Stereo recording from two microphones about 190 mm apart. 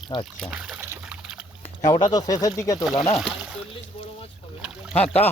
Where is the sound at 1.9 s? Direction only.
20° left (ahead or behind).